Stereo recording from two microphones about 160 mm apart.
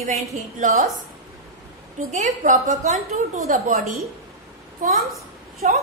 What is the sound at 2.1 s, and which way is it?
A woman's voice, 50° right (ahead or behind).